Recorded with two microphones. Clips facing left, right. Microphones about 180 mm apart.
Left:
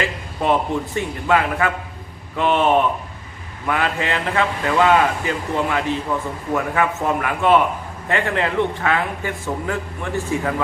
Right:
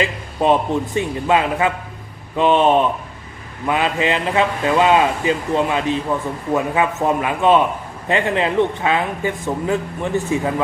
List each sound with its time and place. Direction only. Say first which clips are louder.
0.0 s a man's voice: right 4 dB; 20° right (ahead or behind)